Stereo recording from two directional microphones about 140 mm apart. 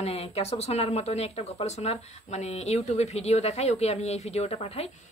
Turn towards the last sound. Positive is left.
turn(degrees=45)  # may be behind; listen again after turning